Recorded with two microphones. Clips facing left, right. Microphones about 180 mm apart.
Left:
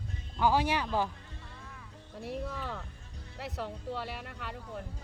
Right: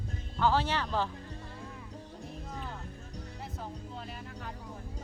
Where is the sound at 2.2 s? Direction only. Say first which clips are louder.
Left 7 dB; 80° left.